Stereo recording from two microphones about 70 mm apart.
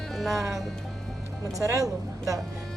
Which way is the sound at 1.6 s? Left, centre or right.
Right.